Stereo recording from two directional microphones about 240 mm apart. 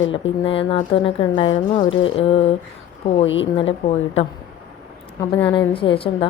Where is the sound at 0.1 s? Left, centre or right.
Left.